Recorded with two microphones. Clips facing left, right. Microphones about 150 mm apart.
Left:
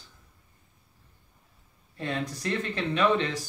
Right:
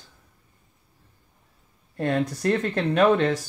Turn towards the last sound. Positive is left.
turn(degrees=-50)  # may be behind; listen again after turning